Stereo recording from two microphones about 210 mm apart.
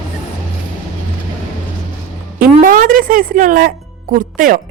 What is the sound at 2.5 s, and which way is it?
A woman's voice, 40° right (ahead or behind).